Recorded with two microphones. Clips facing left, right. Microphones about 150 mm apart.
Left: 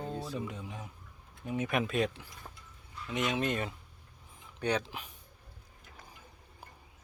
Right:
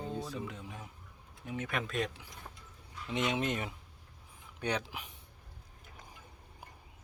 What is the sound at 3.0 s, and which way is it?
Speech, 25° right (ahead or behind).